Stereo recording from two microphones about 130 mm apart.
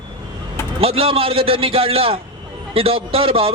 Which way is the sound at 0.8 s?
45° right (ahead or behind).